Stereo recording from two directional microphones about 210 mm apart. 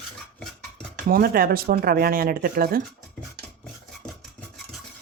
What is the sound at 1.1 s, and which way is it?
Speech, 45° right (ahead or behind).